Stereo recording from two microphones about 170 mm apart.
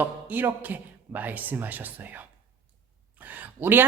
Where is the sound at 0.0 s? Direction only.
10° right (ahead or behind).